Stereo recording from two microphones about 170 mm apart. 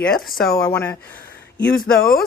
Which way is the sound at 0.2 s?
Centre (ahead or behind).